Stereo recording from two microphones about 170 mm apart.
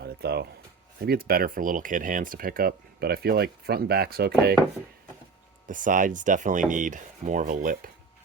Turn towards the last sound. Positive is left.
turn(degrees=-50)  # may be behind; listen again after turning